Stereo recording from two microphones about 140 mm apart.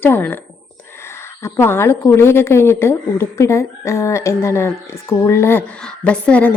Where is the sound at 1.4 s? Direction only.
15° left (ahead or behind).